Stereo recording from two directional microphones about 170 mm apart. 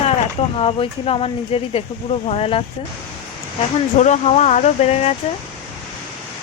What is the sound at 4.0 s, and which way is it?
Speech, 45° left (ahead or behind).